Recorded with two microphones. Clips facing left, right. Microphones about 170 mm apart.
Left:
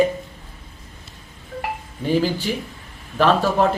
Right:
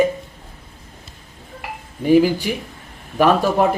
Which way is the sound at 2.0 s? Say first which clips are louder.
Right 6 dB; 10° right (ahead or behind).